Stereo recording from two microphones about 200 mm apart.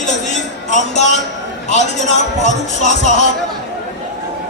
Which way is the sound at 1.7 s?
35° left (ahead or behind).